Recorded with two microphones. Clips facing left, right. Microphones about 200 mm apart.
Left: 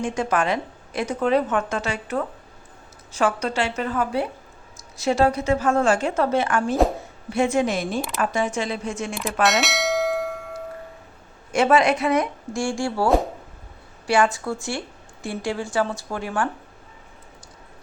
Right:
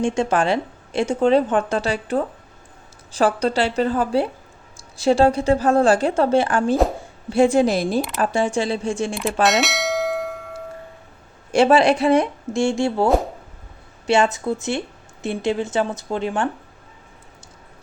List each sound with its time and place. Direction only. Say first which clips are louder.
0.0 s a woman's voice: right 4 dB; 30° right (ahead or behind)
9.1 s bell: right 1 dB; centre (ahead or behind)
11.5 s a woman's voice: right 3 dB; 30° right (ahead or behind)
14.1 s a woman's voice: right 2 dB; 20° right (ahead or behind)